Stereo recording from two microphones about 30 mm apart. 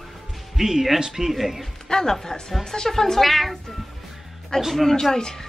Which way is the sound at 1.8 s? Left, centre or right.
Left.